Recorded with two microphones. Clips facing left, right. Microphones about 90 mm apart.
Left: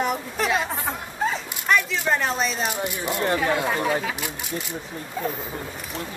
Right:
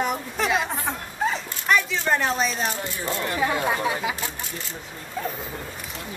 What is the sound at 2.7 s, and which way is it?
Speech, 15° left (ahead or behind).